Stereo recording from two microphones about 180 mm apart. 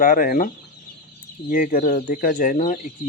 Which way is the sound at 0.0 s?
50° left (ahead or behind).